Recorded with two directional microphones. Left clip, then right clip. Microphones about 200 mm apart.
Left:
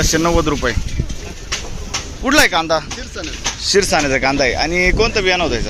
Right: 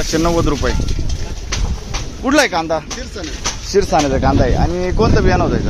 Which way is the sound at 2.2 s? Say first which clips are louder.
Left 1 dB; 10° right (ahead or behind).